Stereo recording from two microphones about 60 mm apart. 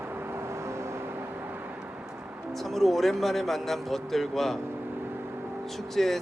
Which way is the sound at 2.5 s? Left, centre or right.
Centre.